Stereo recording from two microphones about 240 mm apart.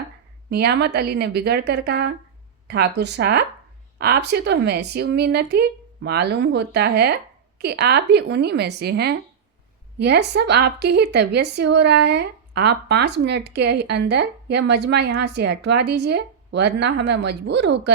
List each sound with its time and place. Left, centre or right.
0.5 s a woman's voice: right